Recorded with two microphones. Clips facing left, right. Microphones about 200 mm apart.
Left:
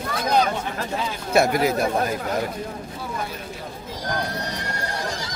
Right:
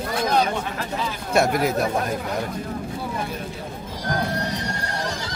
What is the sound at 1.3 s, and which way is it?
Speech, centre (ahead or behind).